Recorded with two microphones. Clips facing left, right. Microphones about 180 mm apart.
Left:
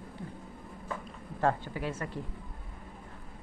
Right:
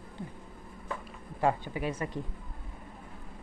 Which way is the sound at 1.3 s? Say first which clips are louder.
Right 1 dB; 15° right (ahead or behind).